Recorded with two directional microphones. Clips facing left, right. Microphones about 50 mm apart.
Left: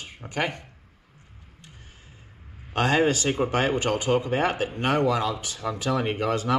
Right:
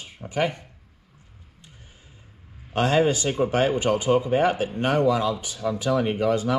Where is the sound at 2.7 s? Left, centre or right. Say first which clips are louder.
Right 1 dB; left.